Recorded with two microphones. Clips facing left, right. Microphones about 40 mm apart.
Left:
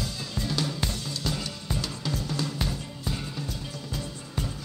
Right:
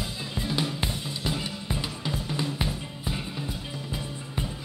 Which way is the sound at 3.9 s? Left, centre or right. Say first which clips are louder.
Even; right.